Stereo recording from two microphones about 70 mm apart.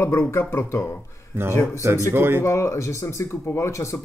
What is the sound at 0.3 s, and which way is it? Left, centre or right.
Speech, left.